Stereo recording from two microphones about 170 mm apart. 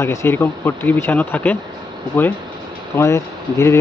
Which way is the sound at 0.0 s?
15° left (ahead or behind).